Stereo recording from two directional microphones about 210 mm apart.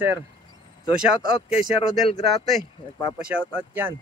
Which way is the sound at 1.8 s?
30° left (ahead or behind).